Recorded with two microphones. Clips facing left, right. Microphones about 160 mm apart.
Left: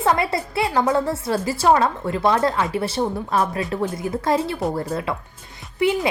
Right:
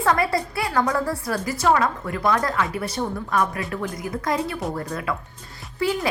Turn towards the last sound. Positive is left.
turn(degrees=20)  # may be behind; listen again after turning